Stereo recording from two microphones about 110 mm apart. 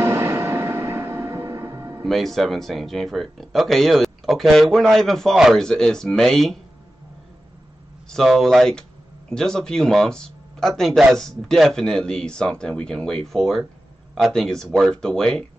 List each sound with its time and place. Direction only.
0.0 s music: 20° right (ahead or behind)
2.0 s speech: centre (ahead or behind)
8.1 s speech: centre (ahead or behind)